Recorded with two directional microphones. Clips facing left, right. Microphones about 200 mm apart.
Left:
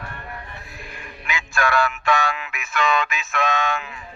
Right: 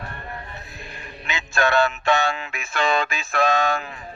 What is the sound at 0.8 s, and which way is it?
Music, 25° right (ahead or behind).